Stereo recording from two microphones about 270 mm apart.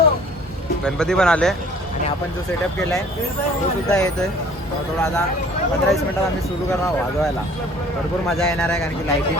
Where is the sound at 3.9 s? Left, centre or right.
Centre.